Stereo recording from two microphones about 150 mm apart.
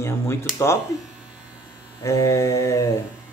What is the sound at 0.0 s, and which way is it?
Speech, 15° left (ahead or behind).